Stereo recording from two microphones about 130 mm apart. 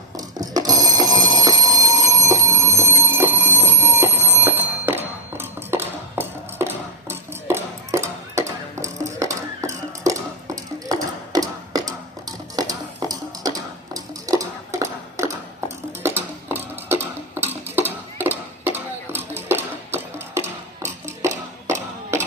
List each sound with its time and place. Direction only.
0.2 s telephone bell ringing: 30° right (ahead or behind)
12.5 s a sound: 30° right (ahead or behind)
20.8 s music: 20° right (ahead or behind)